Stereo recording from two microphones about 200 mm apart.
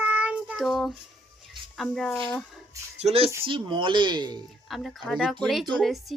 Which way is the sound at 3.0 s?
30° right (ahead or behind).